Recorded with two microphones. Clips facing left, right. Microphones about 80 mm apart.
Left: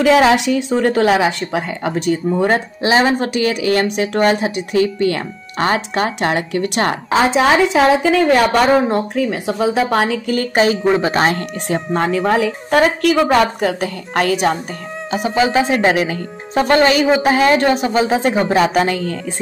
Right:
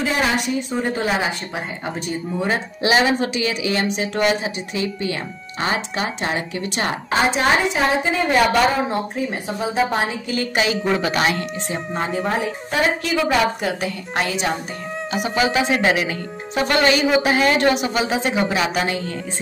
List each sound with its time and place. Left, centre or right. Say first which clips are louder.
0.0 s a woman's voice: left 9 dB; left
2.8 s speech: left 1 dB; left
7.7 s a woman's voice: left 7 dB; left
8.6 s speech: left 6 dB; left
9.1 s a woman's voice: left 6 dB; left
10.2 s speech: left 6 dB; left
11.7 s a woman's voice: left 8 dB; left
12.8 s a woman's voice: left 4 dB; left
13.2 s speech: left 3 dB; left
15.2 s speech: left 5 dB; left
15.6 s speech: left 4 dB; left